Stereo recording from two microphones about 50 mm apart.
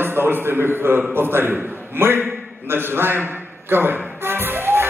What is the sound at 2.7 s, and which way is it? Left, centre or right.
Music, right.